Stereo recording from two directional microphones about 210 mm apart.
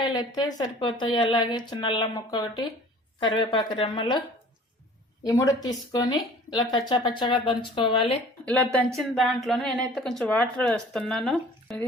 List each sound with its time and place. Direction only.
0.1 s speech: 20° left (ahead or behind)
5.2 s speech: 15° left (ahead or behind)
9.0 s a woman's voice: centre (ahead or behind)